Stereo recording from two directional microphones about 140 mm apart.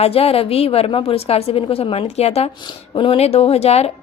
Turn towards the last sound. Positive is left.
turn(degrees=50)  # may be behind; listen again after turning